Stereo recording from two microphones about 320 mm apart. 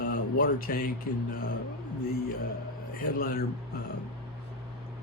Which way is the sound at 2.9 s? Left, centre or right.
Left.